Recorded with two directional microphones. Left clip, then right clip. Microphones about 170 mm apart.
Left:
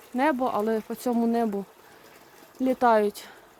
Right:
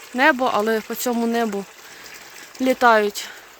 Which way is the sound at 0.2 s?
Centre (ahead or behind).